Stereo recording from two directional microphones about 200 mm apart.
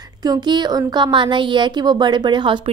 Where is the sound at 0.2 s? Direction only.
20° right (ahead or behind).